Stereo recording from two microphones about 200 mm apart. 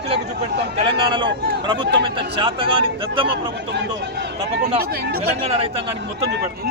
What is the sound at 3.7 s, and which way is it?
Speech, 60° right (ahead or behind).